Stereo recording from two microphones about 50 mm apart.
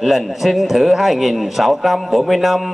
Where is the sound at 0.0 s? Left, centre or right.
Centre.